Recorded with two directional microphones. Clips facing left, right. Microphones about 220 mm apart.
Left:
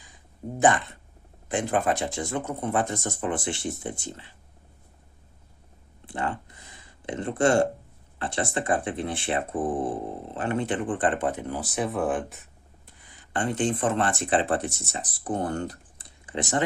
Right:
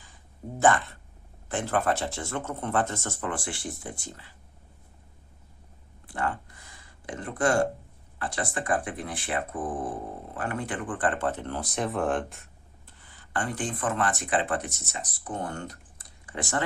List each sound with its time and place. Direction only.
0.6 s speech: 15° left (ahead or behind)
6.1 s a sound: 20° left (ahead or behind)
8.2 s speech: 25° left (ahead or behind); by 12.9 s centre (ahead or behind)
12.9 s speech: 15° left (ahead or behind)